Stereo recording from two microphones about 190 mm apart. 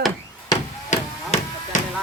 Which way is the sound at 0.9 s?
35° left (ahead or behind).